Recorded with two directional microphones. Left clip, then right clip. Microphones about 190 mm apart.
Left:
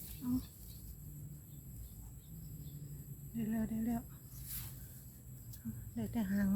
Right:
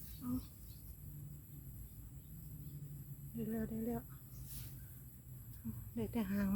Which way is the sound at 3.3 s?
20° right (ahead or behind).